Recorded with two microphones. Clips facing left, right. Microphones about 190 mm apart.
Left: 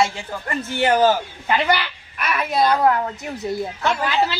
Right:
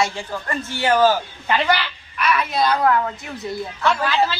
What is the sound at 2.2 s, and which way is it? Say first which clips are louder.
Speech: even; 50° left (ahead or behind).